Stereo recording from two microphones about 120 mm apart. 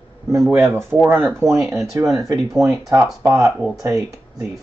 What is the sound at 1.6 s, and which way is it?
Speech, centre (ahead or behind).